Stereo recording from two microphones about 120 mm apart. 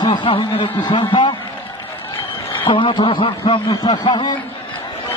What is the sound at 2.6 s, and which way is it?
A man's voice, 45° left (ahead or behind).